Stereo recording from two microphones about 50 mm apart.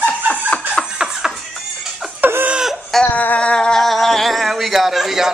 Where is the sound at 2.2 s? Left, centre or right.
Right.